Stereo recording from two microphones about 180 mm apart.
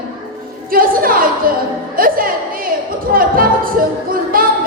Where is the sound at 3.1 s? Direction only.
55° right (ahead or behind).